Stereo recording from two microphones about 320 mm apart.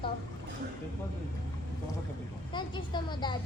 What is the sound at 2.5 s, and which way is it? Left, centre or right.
Vehicle, centre.